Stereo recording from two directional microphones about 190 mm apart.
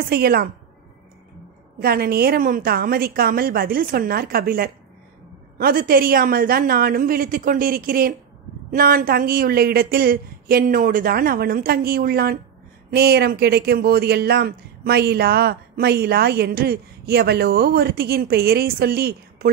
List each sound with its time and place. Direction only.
0.1 s speech: 55° right (ahead or behind)
1.8 s speech: 55° right (ahead or behind)